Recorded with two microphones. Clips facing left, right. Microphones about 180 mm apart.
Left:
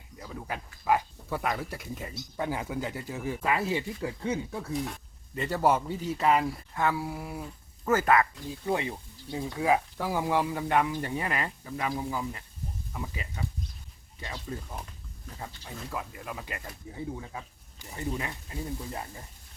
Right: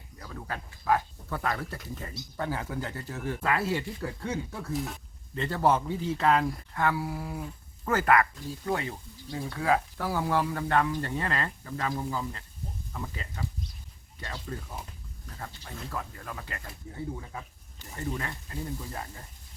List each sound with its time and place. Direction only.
0.2 s speech: 10° left (ahead or behind)
6.8 s speech: 20° left (ahead or behind)